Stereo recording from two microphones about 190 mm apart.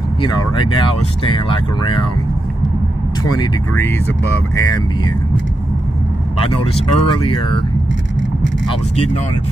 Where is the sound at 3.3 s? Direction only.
15° left (ahead or behind).